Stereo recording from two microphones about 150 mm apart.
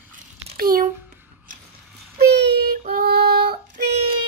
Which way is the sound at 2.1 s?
90° right.